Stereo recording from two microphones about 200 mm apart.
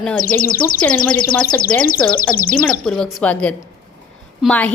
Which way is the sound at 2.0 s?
5° left (ahead or behind).